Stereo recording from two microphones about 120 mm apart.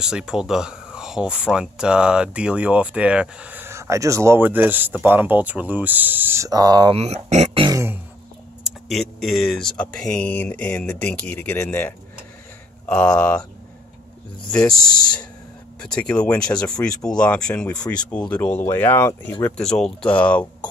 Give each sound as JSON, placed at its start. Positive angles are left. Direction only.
{"t": 0.0, "sound": "speech", "side_deg": -5}
{"t": 6.9, "sound": "speech", "side_deg": -65}
{"t": 7.7, "sound": "throat clearing", "side_deg": -20}
{"t": 8.6, "sound": "speech", "side_deg": 0}
{"t": 12.8, "sound": "speech", "side_deg": 10}
{"t": 14.5, "sound": "speech", "side_deg": 5}
{"t": 19.4, "sound": "speech", "side_deg": 5}